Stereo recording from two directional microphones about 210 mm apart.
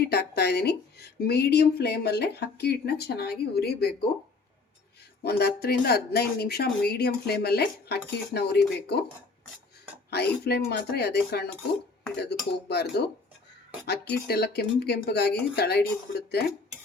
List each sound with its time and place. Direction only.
0.0 s speech: 50° left (ahead or behind)
5.2 s speech: 50° left (ahead or behind)
10.1 s speech: 50° left (ahead or behind)